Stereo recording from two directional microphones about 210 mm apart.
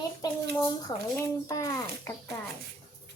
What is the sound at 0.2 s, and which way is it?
A child's voice, 20° left (ahead or behind).